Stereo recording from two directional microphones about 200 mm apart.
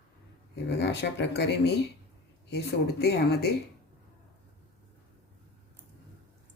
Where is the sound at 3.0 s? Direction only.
55° left (ahead or behind).